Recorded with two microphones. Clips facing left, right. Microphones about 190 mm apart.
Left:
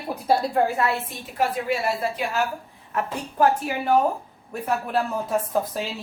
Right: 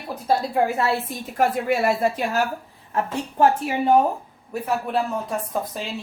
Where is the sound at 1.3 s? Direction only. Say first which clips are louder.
Right 3 dB; 45° right (ahead or behind).